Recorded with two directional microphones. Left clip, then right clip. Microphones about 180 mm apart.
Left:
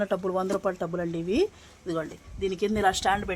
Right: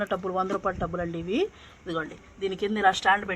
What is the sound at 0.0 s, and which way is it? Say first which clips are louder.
A woman's voice: left 1 dB; 55° left (ahead or behind).